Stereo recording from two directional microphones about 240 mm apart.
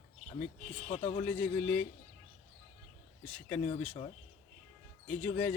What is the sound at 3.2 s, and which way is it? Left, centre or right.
Speech, centre.